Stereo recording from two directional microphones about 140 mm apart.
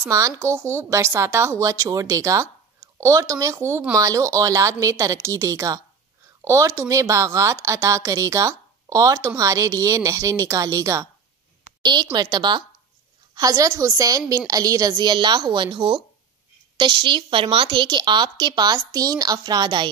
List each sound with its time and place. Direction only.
0.0 s a woman's voice: 20° right (ahead or behind)